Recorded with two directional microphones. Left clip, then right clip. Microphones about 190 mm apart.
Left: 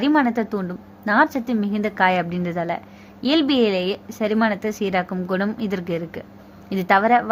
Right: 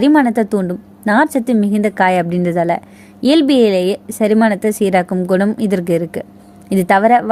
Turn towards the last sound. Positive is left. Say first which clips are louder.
# right 6 dB
turn(degrees=-45)  # may be behind; listen again after turning